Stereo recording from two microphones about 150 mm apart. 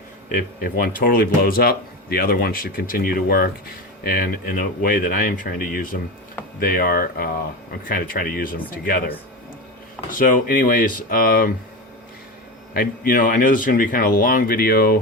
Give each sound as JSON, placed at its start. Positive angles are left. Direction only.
{"t": 0.6, "sound": "speech", "side_deg": 75}
{"t": 4.1, "sound": "speech", "side_deg": 75}
{"t": 12.7, "sound": "speech", "side_deg": 75}